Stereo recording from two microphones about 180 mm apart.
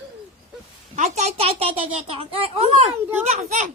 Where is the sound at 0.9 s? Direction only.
35° right (ahead or behind).